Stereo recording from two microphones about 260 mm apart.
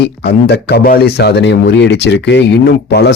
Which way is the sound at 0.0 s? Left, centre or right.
Left.